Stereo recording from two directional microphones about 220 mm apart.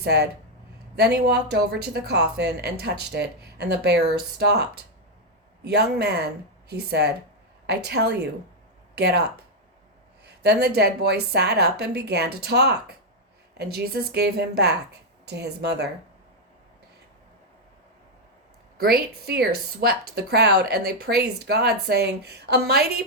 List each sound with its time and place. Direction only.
0.0 s speech: 50° right (ahead or behind)
10.2 s a sound: 50° right (ahead or behind)
10.8 s speech: 50° right (ahead or behind)
18.8 s speech: 45° right (ahead or behind)